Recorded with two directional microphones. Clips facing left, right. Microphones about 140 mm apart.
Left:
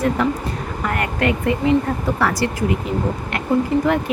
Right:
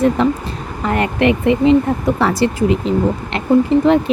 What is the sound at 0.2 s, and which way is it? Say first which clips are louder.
Speech: right 4 dB; 25° right (ahead or behind).